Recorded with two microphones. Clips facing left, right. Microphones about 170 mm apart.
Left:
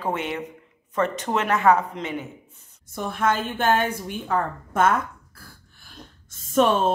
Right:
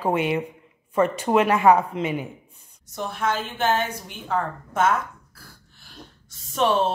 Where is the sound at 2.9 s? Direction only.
50° left (ahead or behind).